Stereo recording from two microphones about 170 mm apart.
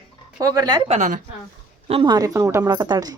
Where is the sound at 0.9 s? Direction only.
45° right (ahead or behind).